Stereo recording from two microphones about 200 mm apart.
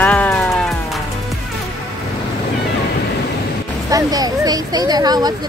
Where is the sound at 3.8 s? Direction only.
20° right (ahead or behind).